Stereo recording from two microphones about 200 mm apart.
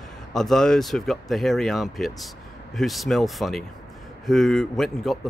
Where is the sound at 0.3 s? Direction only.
Centre (ahead or behind).